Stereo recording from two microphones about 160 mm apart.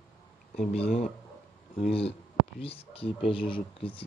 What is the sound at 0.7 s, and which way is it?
Speech, 40° left (ahead or behind).